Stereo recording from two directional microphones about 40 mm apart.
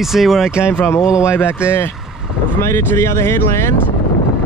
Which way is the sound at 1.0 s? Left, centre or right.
Right.